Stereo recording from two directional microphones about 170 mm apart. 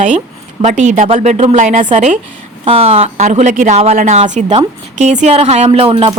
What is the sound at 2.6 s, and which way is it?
A woman's voice, 35° right (ahead or behind).